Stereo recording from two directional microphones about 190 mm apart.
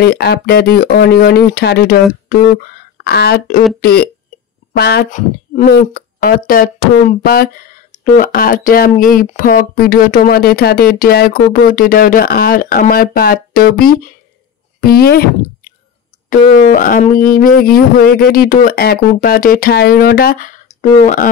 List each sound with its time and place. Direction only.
0.0 s speech: 55° left (ahead or behind)
5.1 s a woman's voice: 45° left (ahead or behind)
14.8 s a sound: 55° left (ahead or behind)
16.3 s speech: 45° left (ahead or behind)